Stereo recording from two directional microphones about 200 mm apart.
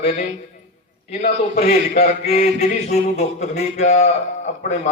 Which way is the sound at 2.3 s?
30° left (ahead or behind).